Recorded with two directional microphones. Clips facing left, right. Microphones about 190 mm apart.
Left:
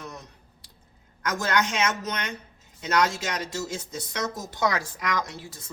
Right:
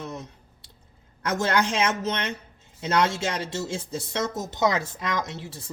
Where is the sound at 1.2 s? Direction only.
30° right (ahead or behind).